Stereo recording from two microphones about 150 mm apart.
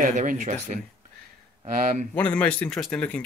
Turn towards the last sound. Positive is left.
turn(degrees=10)  # may be behind; listen again after turning